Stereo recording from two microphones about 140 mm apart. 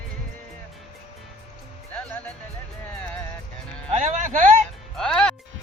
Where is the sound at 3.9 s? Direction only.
65° right (ahead or behind).